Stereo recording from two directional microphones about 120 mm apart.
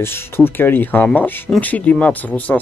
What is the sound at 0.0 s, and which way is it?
Speech, 20° left (ahead or behind).